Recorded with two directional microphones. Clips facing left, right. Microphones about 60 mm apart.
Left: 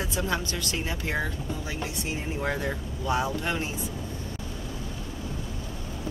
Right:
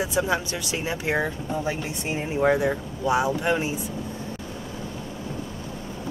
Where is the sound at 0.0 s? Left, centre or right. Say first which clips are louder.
Right 5 dB; centre.